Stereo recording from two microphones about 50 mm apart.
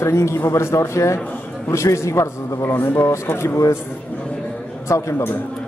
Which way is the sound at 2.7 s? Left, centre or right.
Left.